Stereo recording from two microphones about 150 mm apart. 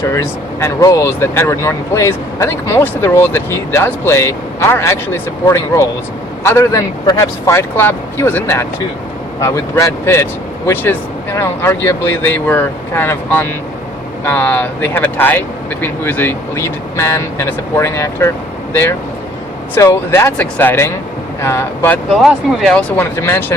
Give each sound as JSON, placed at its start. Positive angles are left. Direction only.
{"t": 0.0, "sound": "speech", "side_deg": 20}
{"t": 22.1, "sound": "speech", "side_deg": 0}